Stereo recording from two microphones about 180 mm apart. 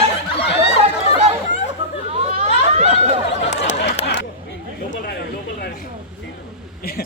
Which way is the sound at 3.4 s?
40° left (ahead or behind).